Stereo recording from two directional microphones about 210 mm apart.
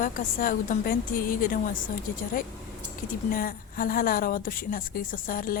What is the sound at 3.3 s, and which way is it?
A woman's voice, 40° left (ahead or behind).